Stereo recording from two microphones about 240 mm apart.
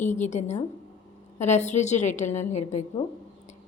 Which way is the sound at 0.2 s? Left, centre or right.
Left.